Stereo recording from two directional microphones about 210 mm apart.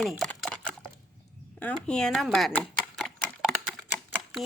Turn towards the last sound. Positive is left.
turn(degrees=0)  # may be behind; listen again after turning